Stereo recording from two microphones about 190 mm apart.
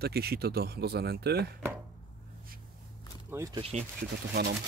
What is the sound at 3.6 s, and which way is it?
Speech, 30° right (ahead or behind).